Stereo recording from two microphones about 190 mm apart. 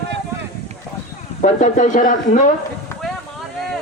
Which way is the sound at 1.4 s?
40° left (ahead or behind).